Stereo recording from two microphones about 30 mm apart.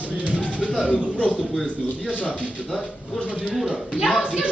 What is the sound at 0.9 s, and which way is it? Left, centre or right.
Speech, left.